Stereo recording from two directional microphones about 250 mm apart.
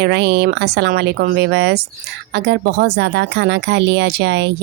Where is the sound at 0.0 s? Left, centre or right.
Right.